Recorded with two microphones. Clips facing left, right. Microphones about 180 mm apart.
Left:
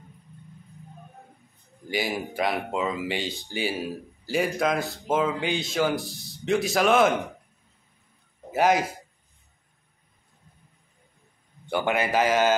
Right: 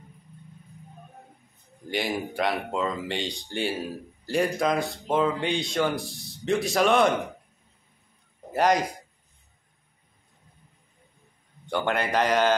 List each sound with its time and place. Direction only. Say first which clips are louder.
1.9 s speech: even; 5° left (ahead or behind)
8.5 s a man's voice: left 1 dB; 5° left (ahead or behind)
11.6 s speech: left 1 dB; 5° left (ahead or behind)